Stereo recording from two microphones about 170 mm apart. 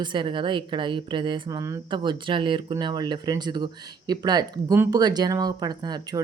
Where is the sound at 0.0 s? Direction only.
30° right (ahead or behind).